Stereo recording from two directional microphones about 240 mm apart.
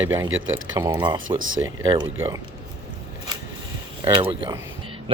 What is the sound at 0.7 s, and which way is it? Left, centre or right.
Speech, centre.